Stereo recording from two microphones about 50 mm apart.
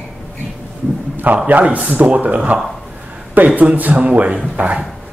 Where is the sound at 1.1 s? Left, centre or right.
Right.